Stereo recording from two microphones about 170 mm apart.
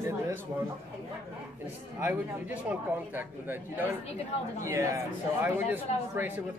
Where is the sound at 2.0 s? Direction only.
10° right (ahead or behind).